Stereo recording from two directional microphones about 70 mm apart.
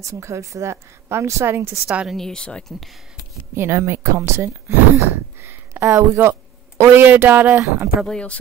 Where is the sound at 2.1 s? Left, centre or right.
Centre.